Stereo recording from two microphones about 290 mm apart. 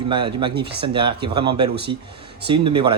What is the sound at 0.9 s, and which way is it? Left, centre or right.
Speech, centre.